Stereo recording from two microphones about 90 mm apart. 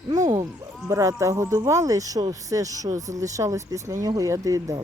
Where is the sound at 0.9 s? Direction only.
35° right (ahead or behind).